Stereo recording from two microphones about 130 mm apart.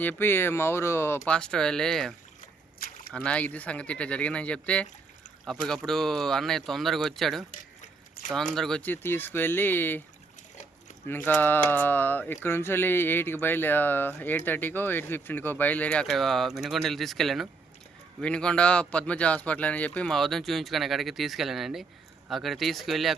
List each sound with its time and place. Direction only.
0.0 s speech: 15° left (ahead or behind)
1.2 s speech: 5° left (ahead or behind)
7.8 s a sound: 75° left (ahead or behind)
8.3 s speech: 5° left (ahead or behind)
8.9 s speech: 15° left (ahead or behind)
11.0 s speech: 15° left (ahead or behind); by 23.1 s centre (ahead or behind)